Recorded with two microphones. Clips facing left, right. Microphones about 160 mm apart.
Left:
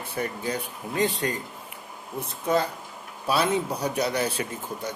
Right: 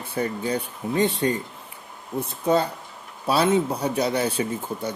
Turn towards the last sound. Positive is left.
turn(degrees=-30)  # may be behind; listen again after turning